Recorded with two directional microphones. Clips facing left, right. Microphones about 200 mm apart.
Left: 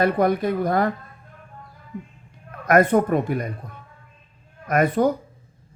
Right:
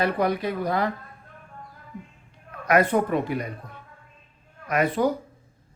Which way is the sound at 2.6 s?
50° left (ahead or behind).